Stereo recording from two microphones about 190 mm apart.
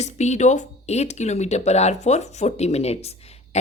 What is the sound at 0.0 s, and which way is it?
Speech, 35° left (ahead or behind).